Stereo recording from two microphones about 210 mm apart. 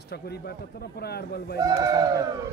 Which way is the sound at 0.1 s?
50° left (ahead or behind).